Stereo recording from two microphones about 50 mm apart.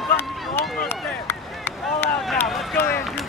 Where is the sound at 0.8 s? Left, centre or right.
Left.